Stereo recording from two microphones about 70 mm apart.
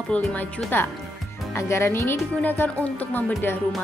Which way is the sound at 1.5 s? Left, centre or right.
Left.